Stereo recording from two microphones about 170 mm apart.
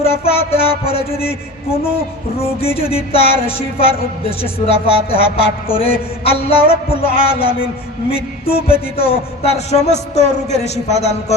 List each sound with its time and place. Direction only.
0.0 s a woman's voice: 35° left (ahead or behind)
9.0 s a woman's voice: 35° left (ahead or behind)